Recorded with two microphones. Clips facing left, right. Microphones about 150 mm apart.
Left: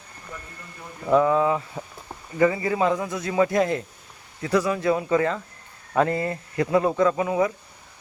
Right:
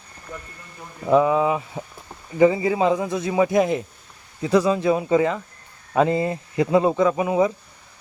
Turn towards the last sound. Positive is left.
turn(degrees=-20)  # may be behind; listen again after turning